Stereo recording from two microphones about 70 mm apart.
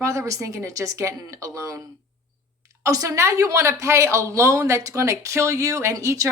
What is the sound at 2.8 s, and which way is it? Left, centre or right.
Speech, right.